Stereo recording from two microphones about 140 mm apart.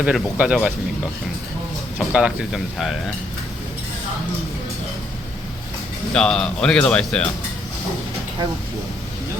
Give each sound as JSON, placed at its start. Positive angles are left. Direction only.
{"t": 0.0, "sound": "speech", "side_deg": -5}
{"t": 2.0, "sound": "speech", "side_deg": -5}
{"t": 6.1, "sound": "speech", "side_deg": 5}